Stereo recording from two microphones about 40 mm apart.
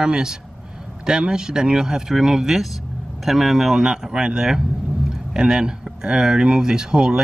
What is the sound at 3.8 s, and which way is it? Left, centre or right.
Speech, centre.